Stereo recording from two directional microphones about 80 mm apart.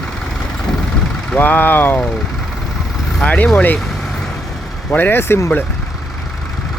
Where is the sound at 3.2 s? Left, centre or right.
Centre.